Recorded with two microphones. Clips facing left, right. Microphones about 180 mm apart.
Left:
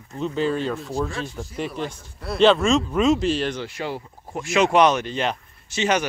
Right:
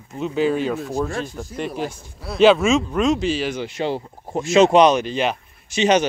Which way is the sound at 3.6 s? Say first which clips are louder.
Right 5 dB; 25° right (ahead or behind).